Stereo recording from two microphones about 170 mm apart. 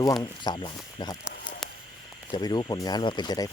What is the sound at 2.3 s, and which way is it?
Speech, 25° left (ahead or behind).